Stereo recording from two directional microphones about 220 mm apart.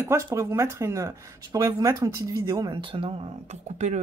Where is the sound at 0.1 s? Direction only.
15° right (ahead or behind).